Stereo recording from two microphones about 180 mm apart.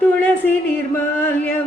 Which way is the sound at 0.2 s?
10° left (ahead or behind).